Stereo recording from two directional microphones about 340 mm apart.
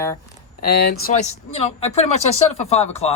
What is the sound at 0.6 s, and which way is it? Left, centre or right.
Speech, left.